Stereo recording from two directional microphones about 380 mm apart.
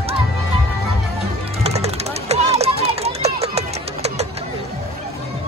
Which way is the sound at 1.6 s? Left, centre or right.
Centre.